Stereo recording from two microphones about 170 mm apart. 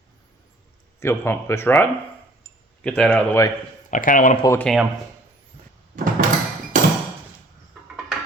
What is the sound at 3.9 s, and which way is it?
Speech, 55° left (ahead or behind).